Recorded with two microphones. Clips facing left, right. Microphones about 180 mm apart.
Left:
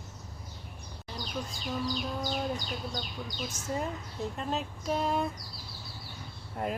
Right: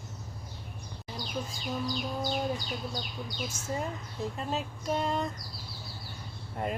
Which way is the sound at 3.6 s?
15° left (ahead or behind).